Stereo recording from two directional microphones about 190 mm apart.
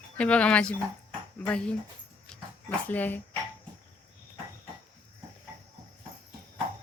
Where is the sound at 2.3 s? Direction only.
5° left (ahead or behind).